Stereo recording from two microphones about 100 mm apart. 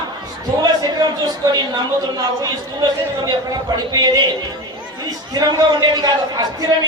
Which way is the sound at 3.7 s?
45° right (ahead or behind).